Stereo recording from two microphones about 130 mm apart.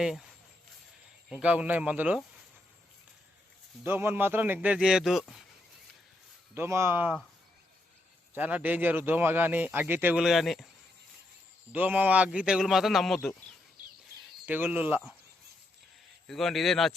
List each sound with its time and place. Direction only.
0.0 s a man's voice: centre (ahead or behind)
1.3 s speech: 10° right (ahead or behind)
3.8 s speech: 15° right (ahead or behind)
6.5 s speech: 20° right (ahead or behind)
8.4 s speech: 10° right (ahead or behind)
10.2 s a man's voice: centre (ahead or behind)
11.7 s speech: 10° right (ahead or behind)
14.4 s speech: 15° right (ahead or behind)
16.2 s a man's voice: centre (ahead or behind)